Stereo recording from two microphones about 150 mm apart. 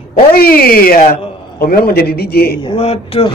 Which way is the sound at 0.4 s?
85° left.